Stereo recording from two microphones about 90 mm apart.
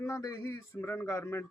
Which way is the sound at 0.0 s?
35° left (ahead or behind).